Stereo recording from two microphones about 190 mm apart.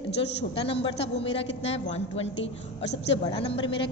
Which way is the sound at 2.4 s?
65° left (ahead or behind).